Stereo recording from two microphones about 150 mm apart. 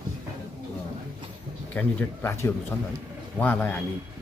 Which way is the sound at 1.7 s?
10° left (ahead or behind).